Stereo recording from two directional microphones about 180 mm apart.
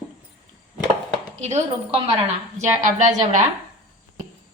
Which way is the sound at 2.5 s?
40° right (ahead or behind).